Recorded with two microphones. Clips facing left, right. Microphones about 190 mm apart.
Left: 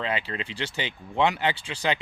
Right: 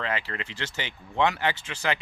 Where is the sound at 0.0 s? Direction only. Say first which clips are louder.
Left 2 dB; 20° left (ahead or behind).